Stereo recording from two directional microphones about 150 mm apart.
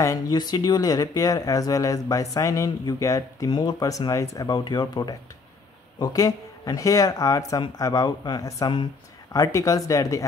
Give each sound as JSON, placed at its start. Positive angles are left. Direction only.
{"t": 0.0, "sound": "speech", "side_deg": 25}